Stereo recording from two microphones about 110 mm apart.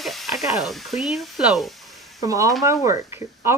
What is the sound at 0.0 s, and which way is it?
Speech, centre (ahead or behind).